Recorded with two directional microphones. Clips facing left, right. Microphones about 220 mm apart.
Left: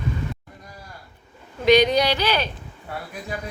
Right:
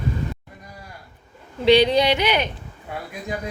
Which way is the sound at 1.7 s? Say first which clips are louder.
Right 1 dB; 30° right (ahead or behind).